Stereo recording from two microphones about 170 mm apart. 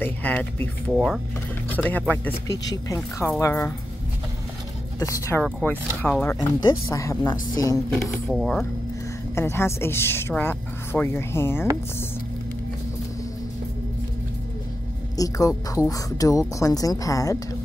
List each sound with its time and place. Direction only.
0.0 s a woman's voice: 10° left (ahead or behind)
5.0 s a woman's voice: 15° left (ahead or behind)
6.6 s a woman's voice: 20° left (ahead or behind)
8.3 s speech: centre (ahead or behind)
9.3 s a woman's voice: 15° left (ahead or behind)
15.1 s a woman's voice: 20° left (ahead or behind)